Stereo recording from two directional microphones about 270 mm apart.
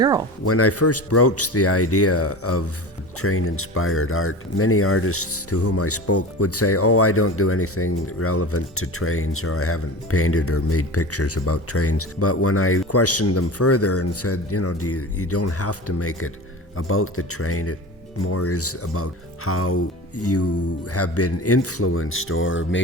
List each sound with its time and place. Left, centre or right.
0.0 s speech: centre
0.4 s speech: left